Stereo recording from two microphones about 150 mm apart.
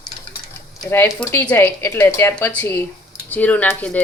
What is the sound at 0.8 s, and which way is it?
A woman's voice, 15° left (ahead or behind).